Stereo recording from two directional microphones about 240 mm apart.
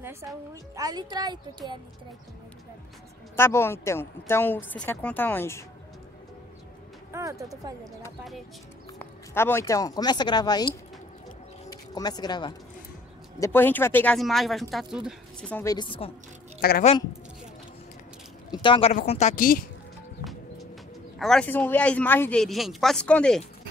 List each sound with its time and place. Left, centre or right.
0.0 s a woman's voice: centre
3.3 s speech: centre
7.1 s speech: centre
9.3 s speech: centre
16.6 s a woman's voice: left
18.5 s a woman's voice: centre; by 19.6 s left
21.2 s speech: centre